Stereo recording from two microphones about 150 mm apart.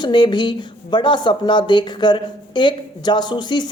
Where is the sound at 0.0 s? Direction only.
30° left (ahead or behind).